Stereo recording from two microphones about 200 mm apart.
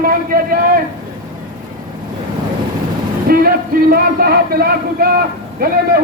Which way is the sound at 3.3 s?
45° right (ahead or behind).